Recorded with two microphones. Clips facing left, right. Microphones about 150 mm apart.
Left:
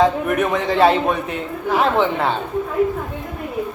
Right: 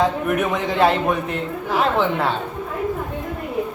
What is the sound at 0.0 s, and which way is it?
A man's voice, centre (ahead or behind).